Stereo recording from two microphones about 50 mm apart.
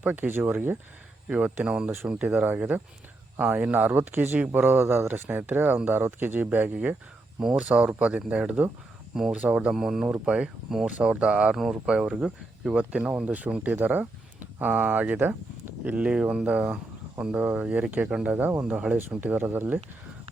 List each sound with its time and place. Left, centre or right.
0.0 s speech: right
1.3 s speech: right
2.2 s speech: right
4.8 s speech: right
9.7 s speech: centre
10.1 s speech: right
11.5 s speech: centre
11.9 s speech: centre
18.6 s speech: right
19.1 s speech: right